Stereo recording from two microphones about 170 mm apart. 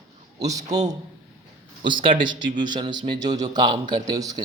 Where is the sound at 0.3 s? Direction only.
20° right (ahead or behind).